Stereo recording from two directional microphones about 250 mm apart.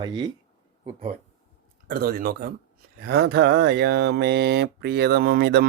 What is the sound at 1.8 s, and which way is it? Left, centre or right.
Speech, right.